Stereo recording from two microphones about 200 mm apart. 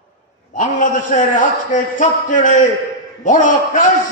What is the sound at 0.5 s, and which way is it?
A man's voice, 40° left (ahead or behind).